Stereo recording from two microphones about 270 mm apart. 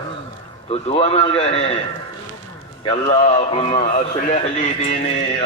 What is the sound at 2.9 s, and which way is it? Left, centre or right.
A man's voice, left.